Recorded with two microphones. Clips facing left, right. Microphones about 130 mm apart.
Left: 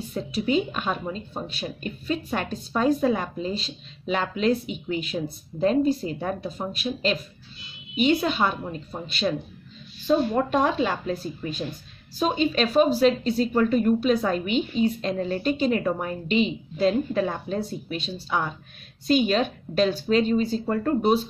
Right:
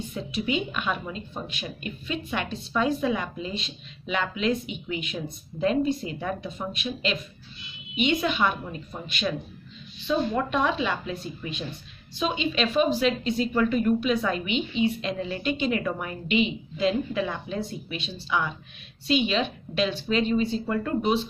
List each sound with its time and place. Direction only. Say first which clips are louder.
0.1 s speech: left 5 dB; 40° left (ahead or behind)